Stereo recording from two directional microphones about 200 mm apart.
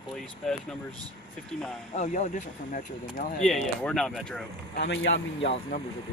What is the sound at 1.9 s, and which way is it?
Speech, 35° left (ahead or behind).